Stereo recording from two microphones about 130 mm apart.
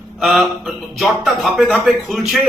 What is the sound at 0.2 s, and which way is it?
A man's voice, centre (ahead or behind).